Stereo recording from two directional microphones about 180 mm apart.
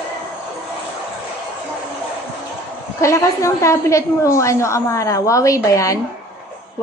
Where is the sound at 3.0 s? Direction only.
15° left (ahead or behind).